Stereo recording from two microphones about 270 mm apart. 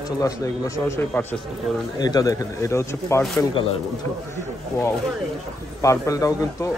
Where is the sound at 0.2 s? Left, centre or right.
Centre.